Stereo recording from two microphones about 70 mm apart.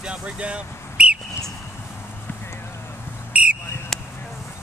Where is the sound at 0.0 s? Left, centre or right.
Centre.